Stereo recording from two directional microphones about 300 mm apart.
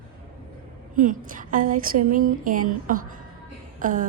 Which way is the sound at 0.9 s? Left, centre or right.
Right.